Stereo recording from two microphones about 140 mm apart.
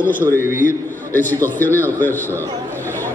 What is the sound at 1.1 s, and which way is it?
A man's voice, 15° left (ahead or behind).